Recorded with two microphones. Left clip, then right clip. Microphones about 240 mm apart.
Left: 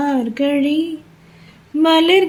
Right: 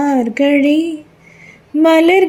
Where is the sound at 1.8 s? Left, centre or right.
Centre.